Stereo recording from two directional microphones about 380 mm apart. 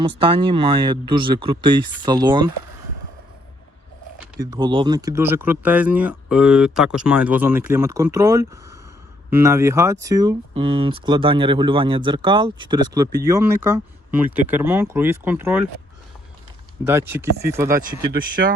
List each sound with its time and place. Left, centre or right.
0.2 s speech: centre
4.4 s speech: centre
16.8 s speech: centre
18.0 s speech: right